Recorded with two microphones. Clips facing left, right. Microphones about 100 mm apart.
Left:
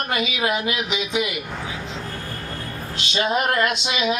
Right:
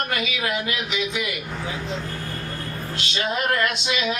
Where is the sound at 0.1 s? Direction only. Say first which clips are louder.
Left 3 dB; 20° left (ahead or behind).